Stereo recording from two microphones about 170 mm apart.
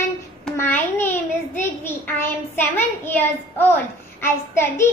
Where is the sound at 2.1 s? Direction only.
10° left (ahead or behind).